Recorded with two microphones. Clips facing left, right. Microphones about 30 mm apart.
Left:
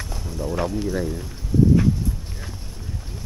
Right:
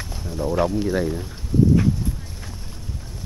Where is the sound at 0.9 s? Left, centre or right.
Centre.